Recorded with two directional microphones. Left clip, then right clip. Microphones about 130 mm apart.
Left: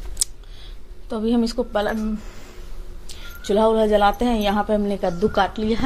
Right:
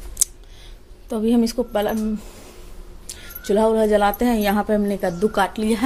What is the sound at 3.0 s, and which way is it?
Speech, 35° right (ahead or behind).